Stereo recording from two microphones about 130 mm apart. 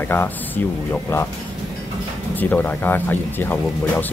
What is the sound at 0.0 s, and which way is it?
Speech, 15° left (ahead or behind).